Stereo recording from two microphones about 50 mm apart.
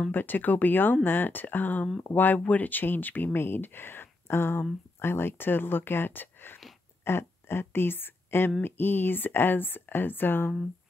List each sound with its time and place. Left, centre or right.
0.1 s speech: left